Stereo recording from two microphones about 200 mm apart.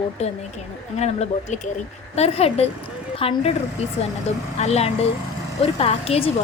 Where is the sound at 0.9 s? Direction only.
35° left (ahead or behind).